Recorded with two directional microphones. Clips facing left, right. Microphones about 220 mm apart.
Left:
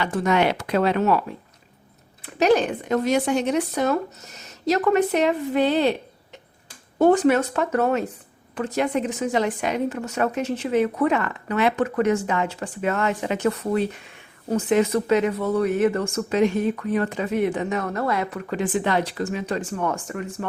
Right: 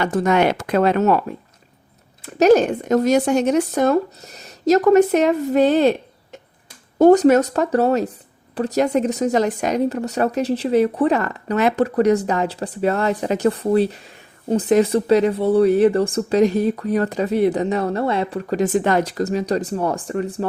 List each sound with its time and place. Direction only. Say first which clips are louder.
0.0 s speech: right 4 dB; 45° right (ahead or behind)
2.4 s speech: right 6 dB; 45° right (ahead or behind)
7.0 s speech: right 5 dB; 40° right (ahead or behind)